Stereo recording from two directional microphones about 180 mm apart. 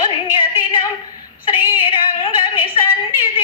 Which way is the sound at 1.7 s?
30° left (ahead or behind).